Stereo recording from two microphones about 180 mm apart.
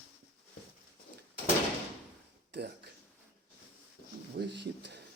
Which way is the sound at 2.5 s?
70° right (ahead or behind).